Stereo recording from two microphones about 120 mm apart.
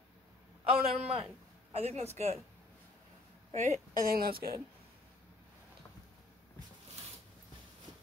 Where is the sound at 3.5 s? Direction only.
85° right.